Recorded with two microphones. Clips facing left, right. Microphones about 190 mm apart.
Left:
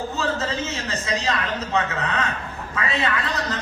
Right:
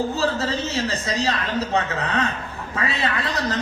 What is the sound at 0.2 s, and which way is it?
A woman's voice, 35° right (ahead or behind).